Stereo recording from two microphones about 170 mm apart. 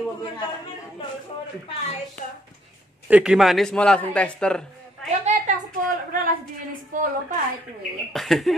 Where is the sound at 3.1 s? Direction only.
5° right (ahead or behind).